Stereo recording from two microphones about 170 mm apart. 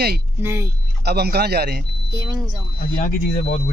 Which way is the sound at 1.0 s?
70° right (ahead or behind).